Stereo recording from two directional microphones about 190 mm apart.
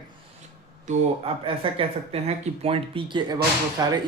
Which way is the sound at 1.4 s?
30° right (ahead or behind).